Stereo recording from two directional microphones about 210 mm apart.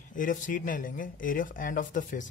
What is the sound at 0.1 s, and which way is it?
Speech, 40° left (ahead or behind).